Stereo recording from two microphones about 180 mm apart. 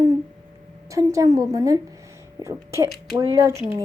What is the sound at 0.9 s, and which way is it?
A woman's voice, 20° right (ahead or behind).